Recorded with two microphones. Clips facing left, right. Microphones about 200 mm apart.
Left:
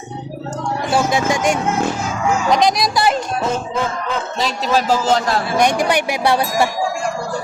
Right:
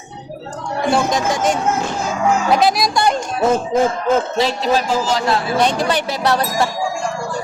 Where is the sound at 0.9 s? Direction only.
5° left (ahead or behind).